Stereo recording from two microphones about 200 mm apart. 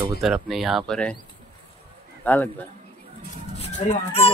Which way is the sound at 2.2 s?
10° left (ahead or behind).